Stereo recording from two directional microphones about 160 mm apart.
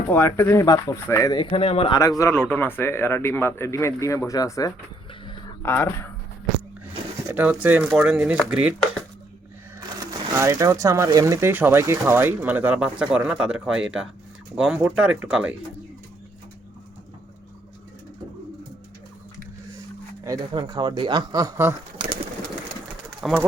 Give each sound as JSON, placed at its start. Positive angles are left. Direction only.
{"t": 0.1, "sound": "speech", "side_deg": 15}
{"t": 2.0, "sound": "speech", "side_deg": 20}
{"t": 7.3, "sound": "speech", "side_deg": -10}
{"t": 9.9, "sound": "speech", "side_deg": -20}
{"t": 20.2, "sound": "speech", "side_deg": -25}
{"t": 23.2, "sound": "speech", "side_deg": 0}